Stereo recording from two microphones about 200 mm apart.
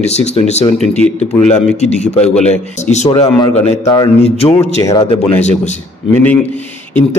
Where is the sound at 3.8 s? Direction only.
15° left (ahead or behind).